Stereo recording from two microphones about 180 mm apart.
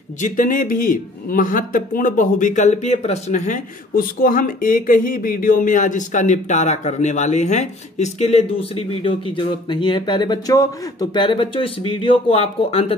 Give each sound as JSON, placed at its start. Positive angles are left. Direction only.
{"t": 0.2, "sound": "a man's voice", "side_deg": 45}